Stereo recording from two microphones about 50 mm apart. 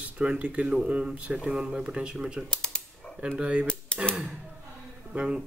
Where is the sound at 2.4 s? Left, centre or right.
Centre.